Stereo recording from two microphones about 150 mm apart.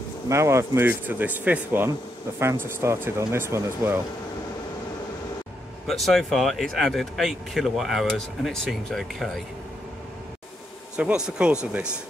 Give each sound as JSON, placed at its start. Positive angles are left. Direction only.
{"t": 0.3, "sound": "speech", "side_deg": -20}
{"t": 5.9, "sound": "speech", "side_deg": 0}
{"t": 11.0, "sound": "speech", "side_deg": -5}